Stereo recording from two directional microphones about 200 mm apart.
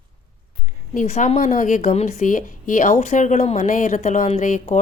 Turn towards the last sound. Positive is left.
turn(degrees=40)  # may be behind; listen again after turning